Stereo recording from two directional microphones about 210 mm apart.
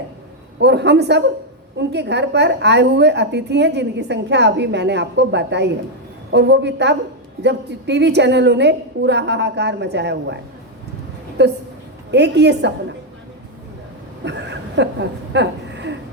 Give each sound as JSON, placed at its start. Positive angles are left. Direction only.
{"t": 0.6, "sound": "a woman's voice", "side_deg": -55}
{"t": 11.4, "sound": "a woman's voice", "side_deg": -55}
{"t": 14.3, "sound": "a woman's voice", "side_deg": -55}